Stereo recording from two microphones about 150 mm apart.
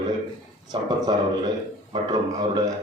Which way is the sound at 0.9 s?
25° right (ahead or behind).